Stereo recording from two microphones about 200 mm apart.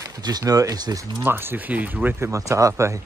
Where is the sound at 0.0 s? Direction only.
20° right (ahead or behind).